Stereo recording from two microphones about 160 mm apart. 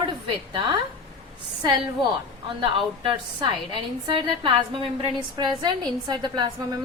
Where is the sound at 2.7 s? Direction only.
30° right (ahead or behind).